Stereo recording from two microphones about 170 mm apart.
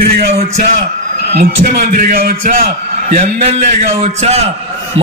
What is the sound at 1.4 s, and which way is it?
A man's voice, 65° right (ahead or behind).